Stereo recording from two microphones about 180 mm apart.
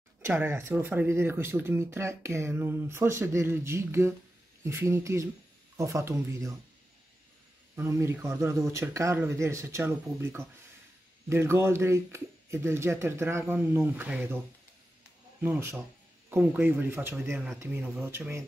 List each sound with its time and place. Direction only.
0.2 s speech: 10° right (ahead or behind)
7.7 s speech: 15° right (ahead or behind)
15.4 s speech: 10° right (ahead or behind)